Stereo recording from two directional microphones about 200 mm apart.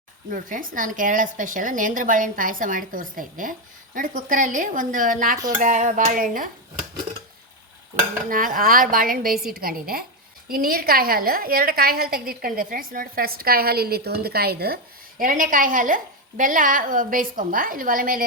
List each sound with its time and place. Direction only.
0.3 s a woman's voice: 40° right (ahead or behind)
8.3 s a woman's voice: 45° right (ahead or behind)